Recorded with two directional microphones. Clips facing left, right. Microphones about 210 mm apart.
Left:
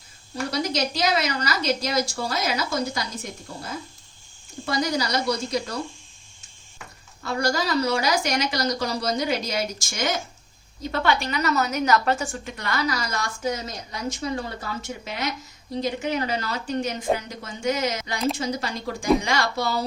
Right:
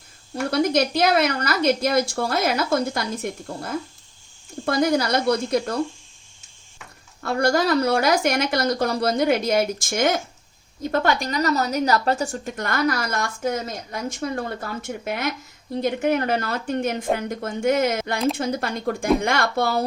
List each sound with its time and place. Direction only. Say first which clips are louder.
0.5 s a woman's voice: right 7 dB; 55° right (ahead or behind)
7.2 s a woman's voice: right 5 dB; 55° right (ahead or behind)